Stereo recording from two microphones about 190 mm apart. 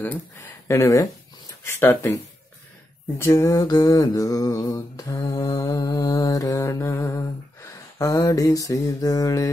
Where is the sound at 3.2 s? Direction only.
15° left (ahead or behind).